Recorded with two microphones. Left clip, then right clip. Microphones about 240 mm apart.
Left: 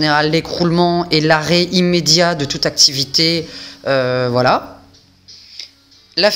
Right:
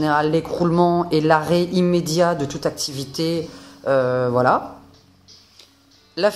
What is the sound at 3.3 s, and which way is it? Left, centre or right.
Speech, left.